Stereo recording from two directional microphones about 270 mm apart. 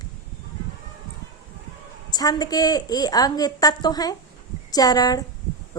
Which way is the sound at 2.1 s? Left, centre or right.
Centre.